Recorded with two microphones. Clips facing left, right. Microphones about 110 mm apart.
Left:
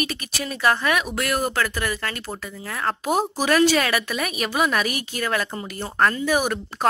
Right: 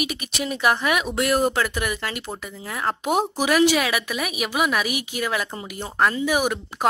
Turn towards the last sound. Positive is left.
turn(degrees=-15)  # may be behind; listen again after turning